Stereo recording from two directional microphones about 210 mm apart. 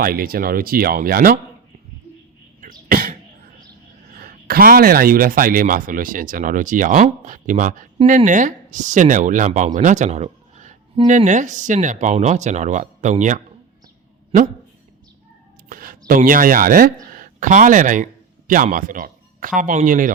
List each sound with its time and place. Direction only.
0.0 s speech: 45° right (ahead or behind)
2.6 s a sound: 40° right (ahead or behind)
4.1 s speech: 45° right (ahead or behind)
15.7 s speech: 40° right (ahead or behind)